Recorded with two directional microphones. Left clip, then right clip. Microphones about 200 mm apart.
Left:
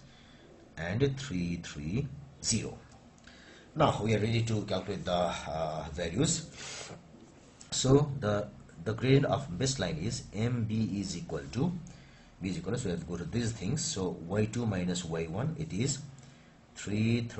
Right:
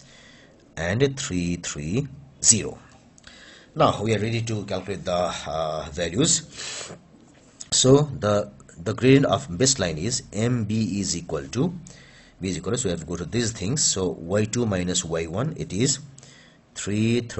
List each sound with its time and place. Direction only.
0.7 s speech: 50° right (ahead or behind)